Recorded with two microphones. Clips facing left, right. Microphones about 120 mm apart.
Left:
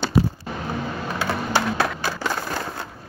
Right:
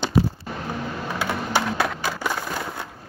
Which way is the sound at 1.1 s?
15° right (ahead or behind).